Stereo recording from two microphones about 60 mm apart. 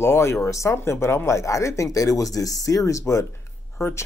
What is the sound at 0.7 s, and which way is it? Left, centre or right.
Speech, left.